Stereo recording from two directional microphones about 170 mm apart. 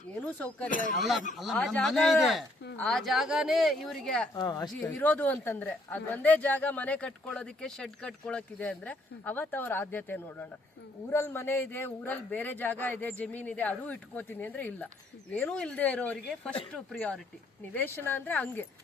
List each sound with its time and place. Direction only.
0.2 s speech: 5° left (ahead or behind)
0.7 s speech: 50° left (ahead or behind)
0.9 s speech: centre (ahead or behind)
4.4 s speech: 25° left (ahead or behind)
4.7 s speech: 5° left (ahead or behind)